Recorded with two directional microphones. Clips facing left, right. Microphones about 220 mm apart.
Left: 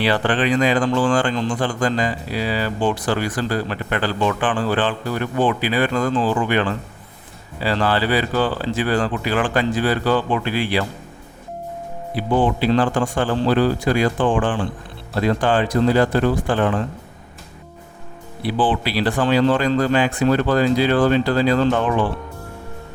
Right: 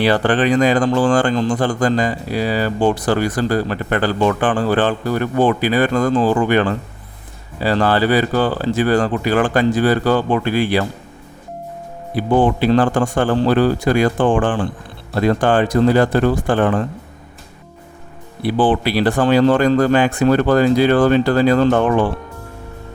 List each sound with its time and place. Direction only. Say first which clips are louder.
0.0 s speech: right 4 dB; 45° right (ahead or behind)
12.1 s speech: right 4 dB; 45° right (ahead or behind)
18.4 s speech: right 4 dB; 45° right (ahead or behind)